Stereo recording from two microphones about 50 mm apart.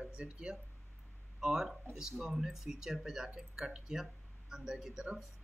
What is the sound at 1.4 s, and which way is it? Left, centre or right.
Speech, centre.